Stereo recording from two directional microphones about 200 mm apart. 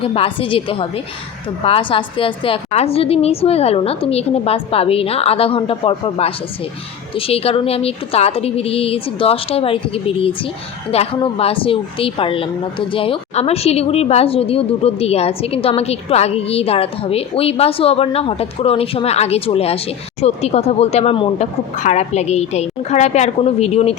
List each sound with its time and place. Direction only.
0.0 s a woman's voice: 30° left (ahead or behind)